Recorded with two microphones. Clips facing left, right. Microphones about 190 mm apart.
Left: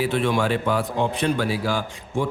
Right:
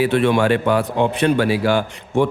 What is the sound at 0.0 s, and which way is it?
Speech, 65° right (ahead or behind).